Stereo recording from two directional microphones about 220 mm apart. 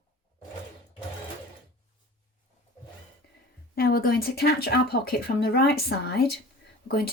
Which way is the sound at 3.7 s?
40° left (ahead or behind).